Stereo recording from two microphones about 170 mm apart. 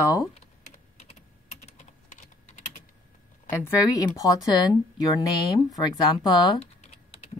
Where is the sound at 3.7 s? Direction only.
20° left (ahead or behind).